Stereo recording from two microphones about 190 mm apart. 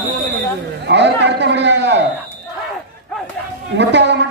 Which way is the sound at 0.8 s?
65° right (ahead or behind).